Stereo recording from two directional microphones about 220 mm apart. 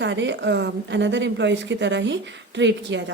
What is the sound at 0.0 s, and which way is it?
A woman's voice, 55° right (ahead or behind).